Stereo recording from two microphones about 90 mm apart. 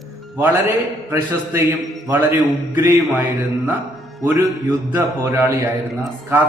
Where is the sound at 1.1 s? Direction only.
30° right (ahead or behind).